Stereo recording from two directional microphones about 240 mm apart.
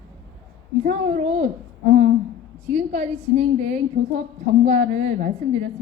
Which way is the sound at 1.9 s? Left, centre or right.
Right.